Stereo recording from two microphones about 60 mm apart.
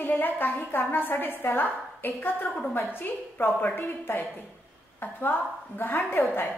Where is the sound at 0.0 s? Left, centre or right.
Left.